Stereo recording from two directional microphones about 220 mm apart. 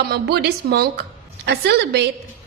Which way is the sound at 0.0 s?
45° right (ahead or behind).